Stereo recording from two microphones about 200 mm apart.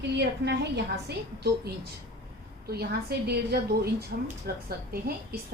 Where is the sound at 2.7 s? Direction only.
55° right (ahead or behind).